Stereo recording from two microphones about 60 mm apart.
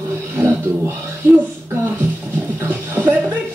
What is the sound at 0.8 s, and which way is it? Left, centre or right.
Speech, right.